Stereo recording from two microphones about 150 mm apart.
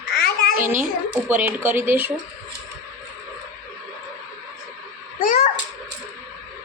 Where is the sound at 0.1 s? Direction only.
90° left.